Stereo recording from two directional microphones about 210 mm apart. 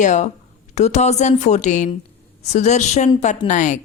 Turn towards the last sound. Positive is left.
turn(degrees=35)  # may be behind; listen again after turning